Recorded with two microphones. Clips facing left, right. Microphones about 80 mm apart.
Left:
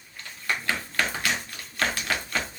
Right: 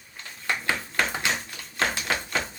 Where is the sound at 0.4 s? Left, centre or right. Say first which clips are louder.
Right 1 dB; right.